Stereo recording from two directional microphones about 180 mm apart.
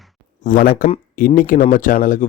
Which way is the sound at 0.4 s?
50° left (ahead or behind).